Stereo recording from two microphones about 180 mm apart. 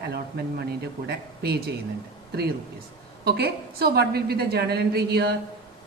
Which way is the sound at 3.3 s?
60° right (ahead or behind).